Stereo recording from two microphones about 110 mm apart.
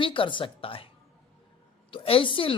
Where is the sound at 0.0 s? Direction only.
50° left (ahead or behind).